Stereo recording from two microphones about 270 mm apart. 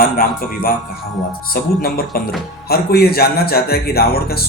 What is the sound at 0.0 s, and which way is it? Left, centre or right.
A man's voice, left.